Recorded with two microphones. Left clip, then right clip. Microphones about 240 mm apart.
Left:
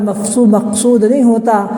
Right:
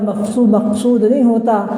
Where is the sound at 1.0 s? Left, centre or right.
Left.